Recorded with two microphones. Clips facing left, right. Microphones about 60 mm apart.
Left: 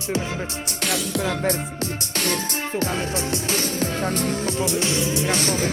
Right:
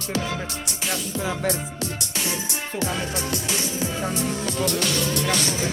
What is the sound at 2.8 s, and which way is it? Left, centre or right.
Music, left.